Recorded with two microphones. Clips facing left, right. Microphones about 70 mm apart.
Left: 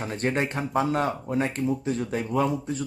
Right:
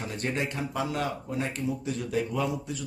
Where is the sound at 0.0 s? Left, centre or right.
Left.